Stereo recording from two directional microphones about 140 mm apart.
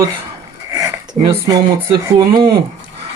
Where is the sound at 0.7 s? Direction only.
25° right (ahead or behind).